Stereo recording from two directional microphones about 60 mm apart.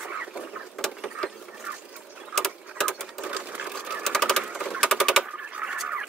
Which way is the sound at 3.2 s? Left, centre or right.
Right.